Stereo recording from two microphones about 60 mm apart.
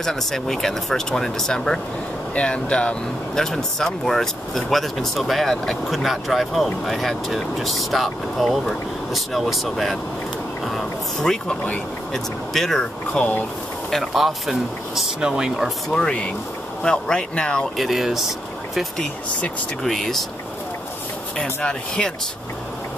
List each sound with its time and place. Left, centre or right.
0.0 s speech: centre
11.4 s speech: left
12.1 s speech: centre
13.1 s speech: left
13.8 s speech: centre
15.9 s speech: centre
17.7 s speech: centre
19.8 s speech: centre
21.4 s speech: centre